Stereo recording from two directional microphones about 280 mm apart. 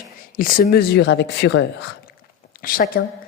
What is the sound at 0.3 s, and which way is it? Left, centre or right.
A woman's voice, left.